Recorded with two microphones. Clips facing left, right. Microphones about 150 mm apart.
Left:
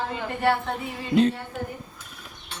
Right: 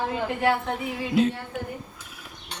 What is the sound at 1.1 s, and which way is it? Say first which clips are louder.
Speech: left 3 dB; 5° right (ahead or behind).